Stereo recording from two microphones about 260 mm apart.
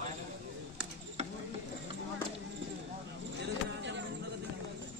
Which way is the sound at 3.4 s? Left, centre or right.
Right.